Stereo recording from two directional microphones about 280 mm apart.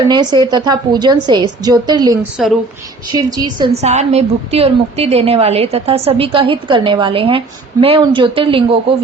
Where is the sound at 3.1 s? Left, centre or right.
Centre.